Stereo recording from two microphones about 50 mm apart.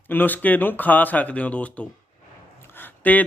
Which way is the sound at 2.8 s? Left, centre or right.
Left.